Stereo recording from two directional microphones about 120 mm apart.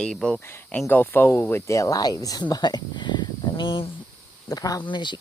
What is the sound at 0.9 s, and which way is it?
Speech, 15° left (ahead or behind).